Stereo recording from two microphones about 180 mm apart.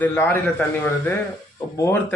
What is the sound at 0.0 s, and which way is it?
Speech, 10° left (ahead or behind).